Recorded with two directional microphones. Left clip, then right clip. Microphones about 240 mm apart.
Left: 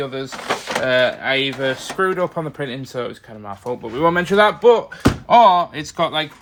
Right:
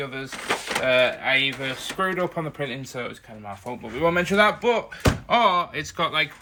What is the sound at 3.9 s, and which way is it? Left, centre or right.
Speech, centre.